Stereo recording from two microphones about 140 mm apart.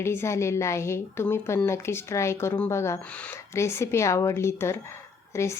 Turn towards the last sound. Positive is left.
turn(degrees=20)  # may be behind; listen again after turning